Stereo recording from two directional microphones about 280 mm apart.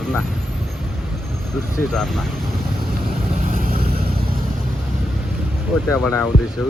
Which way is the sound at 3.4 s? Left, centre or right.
Right.